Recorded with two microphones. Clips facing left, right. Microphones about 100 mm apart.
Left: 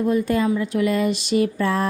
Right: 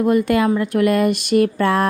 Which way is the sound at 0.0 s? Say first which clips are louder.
Right 4 dB; 70° right (ahead or behind).